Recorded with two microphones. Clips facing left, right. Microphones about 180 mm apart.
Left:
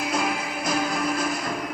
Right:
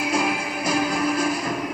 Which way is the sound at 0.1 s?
10° right (ahead or behind).